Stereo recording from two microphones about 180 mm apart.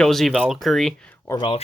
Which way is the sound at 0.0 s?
Centre (ahead or behind).